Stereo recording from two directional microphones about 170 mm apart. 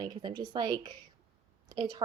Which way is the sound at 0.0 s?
25° right (ahead or behind).